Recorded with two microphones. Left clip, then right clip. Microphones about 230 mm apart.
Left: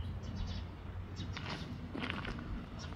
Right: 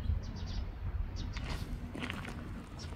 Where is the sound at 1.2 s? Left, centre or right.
Centre.